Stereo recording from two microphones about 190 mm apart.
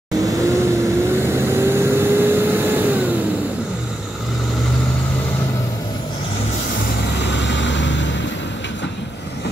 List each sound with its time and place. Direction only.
0.6 s vehicle: 15° right (ahead or behind)
7.2 s vehicle: 65° left (ahead or behind)